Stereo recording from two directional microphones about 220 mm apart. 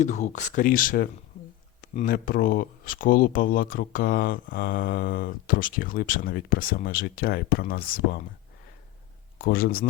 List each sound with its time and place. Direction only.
0.0 s speech: 35° left (ahead or behind)
9.4 s speech: 40° left (ahead or behind)